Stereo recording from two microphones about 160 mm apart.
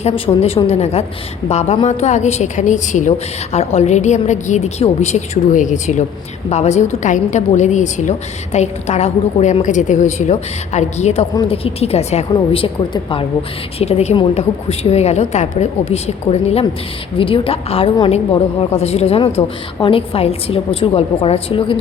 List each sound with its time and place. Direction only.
0.0 s a woman's voice: 40° left (ahead or behind)
12.3 s a woman's voice: 30° left (ahead or behind)